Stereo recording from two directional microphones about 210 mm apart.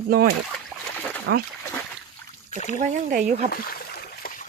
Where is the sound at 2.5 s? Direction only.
35° left (ahead or behind).